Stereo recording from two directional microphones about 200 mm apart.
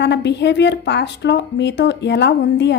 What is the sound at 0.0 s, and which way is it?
A woman's voice, 60° left (ahead or behind).